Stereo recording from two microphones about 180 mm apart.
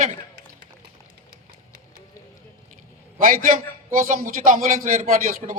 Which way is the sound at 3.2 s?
50° right (ahead or behind).